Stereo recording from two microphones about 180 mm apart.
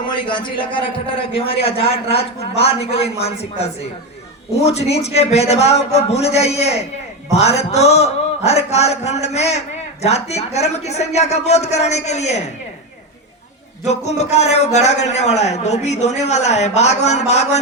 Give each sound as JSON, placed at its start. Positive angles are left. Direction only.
{"t": 0.1, "sound": "a man's voice", "side_deg": 25}
{"t": 13.8, "sound": "a man's voice", "side_deg": 40}